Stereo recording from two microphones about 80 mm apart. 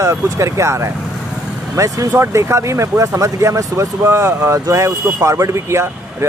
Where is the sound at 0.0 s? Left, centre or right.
Right.